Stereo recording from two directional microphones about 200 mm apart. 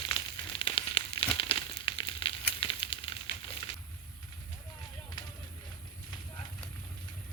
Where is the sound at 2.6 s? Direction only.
25° left (ahead or behind).